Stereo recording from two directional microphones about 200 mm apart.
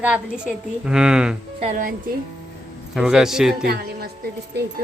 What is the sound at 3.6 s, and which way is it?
Speech, 50° right (ahead or behind).